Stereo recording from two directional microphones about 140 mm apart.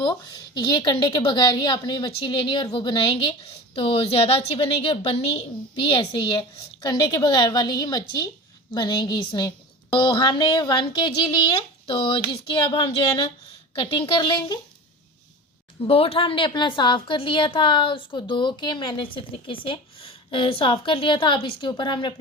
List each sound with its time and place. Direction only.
0.0 s a woman's voice: 35° left (ahead or behind)
15.8 s a woman's voice: 45° left (ahead or behind)